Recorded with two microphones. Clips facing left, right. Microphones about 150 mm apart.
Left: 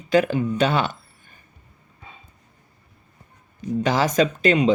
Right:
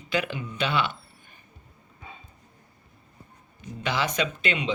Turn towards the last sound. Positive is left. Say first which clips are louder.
# left 10 dB
turn(degrees=40)  # may be behind; listen again after turning